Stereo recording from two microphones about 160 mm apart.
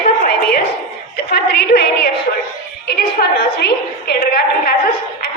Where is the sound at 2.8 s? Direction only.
75° left (ahead or behind).